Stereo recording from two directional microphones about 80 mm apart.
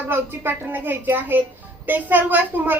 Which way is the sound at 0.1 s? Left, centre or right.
Right.